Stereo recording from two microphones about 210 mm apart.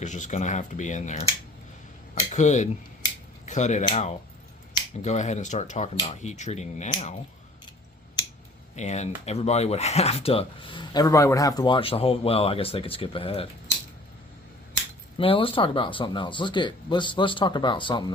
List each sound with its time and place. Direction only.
0.0 s speech: 35° left (ahead or behind)
8.7 s speech: 35° left (ahead or behind)
15.2 s speech: 25° left (ahead or behind)